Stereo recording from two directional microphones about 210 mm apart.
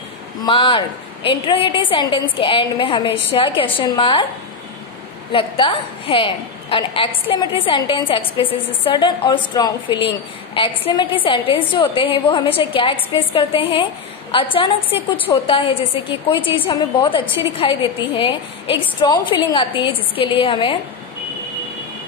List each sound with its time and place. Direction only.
0.4 s a woman's voice: 25° left (ahead or behind)
5.3 s a woman's voice: 25° left (ahead or behind)